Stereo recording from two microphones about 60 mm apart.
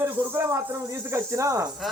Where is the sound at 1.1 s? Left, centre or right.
Right.